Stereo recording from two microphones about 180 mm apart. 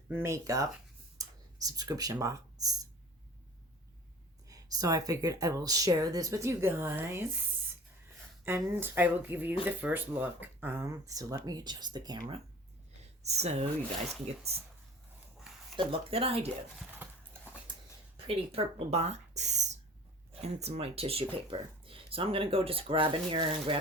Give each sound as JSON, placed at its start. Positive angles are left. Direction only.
{"t": 0.1, "sound": "speech", "side_deg": -15}
{"t": 4.4, "sound": "speech", "side_deg": -20}
{"t": 8.4, "sound": "speech", "side_deg": -15}
{"t": 13.2, "sound": "speech", "side_deg": -35}
{"t": 15.7, "sound": "speech", "side_deg": -30}
{"t": 18.3, "sound": "speech", "side_deg": -35}